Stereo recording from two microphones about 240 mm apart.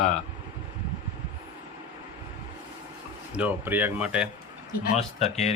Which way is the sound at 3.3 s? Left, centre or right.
Centre.